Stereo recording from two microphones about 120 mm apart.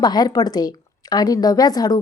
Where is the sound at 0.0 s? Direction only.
35° left (ahead or behind).